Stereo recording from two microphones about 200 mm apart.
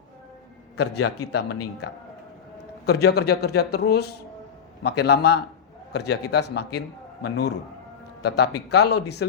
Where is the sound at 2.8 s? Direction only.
55° left (ahead or behind).